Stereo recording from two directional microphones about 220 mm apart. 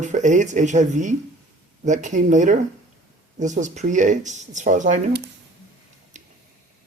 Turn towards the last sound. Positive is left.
turn(degrees=-35)  # may be behind; listen again after turning